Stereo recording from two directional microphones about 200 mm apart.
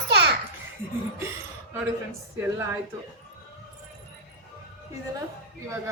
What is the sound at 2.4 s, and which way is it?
Speech, 15° right (ahead or behind).